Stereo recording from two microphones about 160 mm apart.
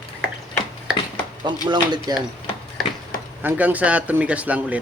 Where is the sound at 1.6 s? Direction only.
25° right (ahead or behind).